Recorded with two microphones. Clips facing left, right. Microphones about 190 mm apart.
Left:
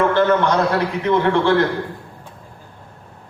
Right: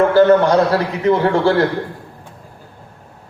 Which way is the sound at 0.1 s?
35° right (ahead or behind).